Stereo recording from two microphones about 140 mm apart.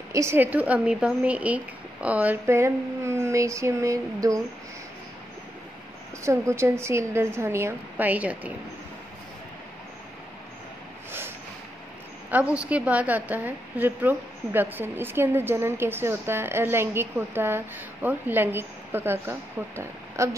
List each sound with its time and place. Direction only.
0.1 s speech: 20° right (ahead or behind)
6.2 s speech: 20° right (ahead or behind)
11.1 s a sound: 15° right (ahead or behind)
12.3 s a woman's voice: 10° right (ahead or behind)